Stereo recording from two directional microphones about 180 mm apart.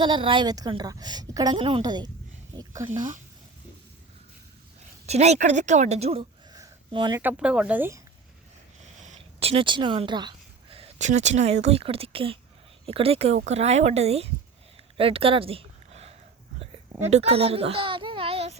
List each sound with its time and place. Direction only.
0.0 s a woman's voice: 25° right (ahead or behind)
5.0 s speech: 35° right (ahead or behind)
6.5 s a sound: 25° right (ahead or behind)
7.2 s speech: 10° right (ahead or behind)
9.0 s speech: 40° right (ahead or behind)
14.9 s a sound: 30° right (ahead or behind)